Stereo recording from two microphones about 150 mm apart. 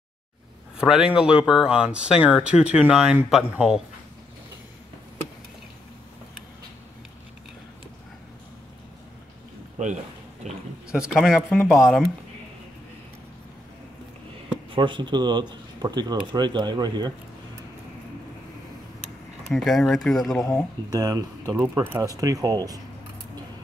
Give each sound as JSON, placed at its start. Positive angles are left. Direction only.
{"t": 0.7, "sound": "speech", "side_deg": -5}
{"t": 11.1, "sound": "speech", "side_deg": 0}
{"t": 14.7, "sound": "speech", "side_deg": -30}
{"t": 19.5, "sound": "speech", "side_deg": 0}
{"t": 20.9, "sound": "speech", "side_deg": -25}
{"t": 21.5, "sound": "speech", "side_deg": -15}